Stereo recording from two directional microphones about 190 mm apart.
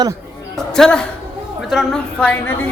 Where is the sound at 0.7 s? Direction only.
5° left (ahead or behind).